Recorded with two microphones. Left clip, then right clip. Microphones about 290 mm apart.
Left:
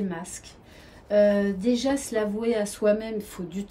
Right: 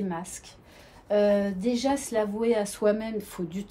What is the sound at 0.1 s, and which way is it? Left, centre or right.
Speech, centre.